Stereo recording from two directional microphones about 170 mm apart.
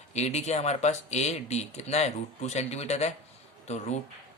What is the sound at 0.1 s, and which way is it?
Speech, 40° left (ahead or behind).